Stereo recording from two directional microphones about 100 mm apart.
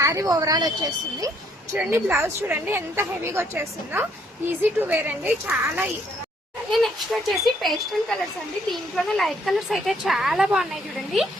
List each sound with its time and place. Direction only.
0.0 s a woman's voice: 35° right (ahead or behind)
1.7 s a woman's voice: 20° right (ahead or behind)
6.7 s speech: centre (ahead or behind)